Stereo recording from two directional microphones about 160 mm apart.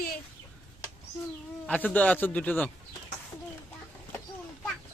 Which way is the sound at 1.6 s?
10° left (ahead or behind).